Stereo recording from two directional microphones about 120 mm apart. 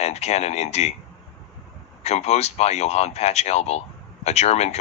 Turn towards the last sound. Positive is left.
turn(degrees=65)  # may be behind; listen again after turning